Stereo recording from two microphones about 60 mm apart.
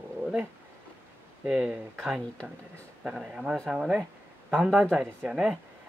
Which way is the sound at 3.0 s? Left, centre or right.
Centre.